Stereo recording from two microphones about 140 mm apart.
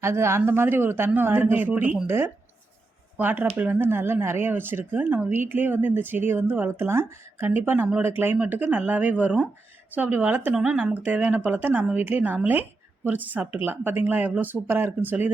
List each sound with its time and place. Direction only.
0.0 s speech: 20° right (ahead or behind)